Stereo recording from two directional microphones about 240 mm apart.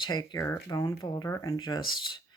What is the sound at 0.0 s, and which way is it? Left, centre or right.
Speech, centre.